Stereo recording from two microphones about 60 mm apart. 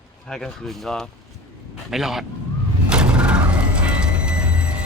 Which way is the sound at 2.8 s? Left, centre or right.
Centre.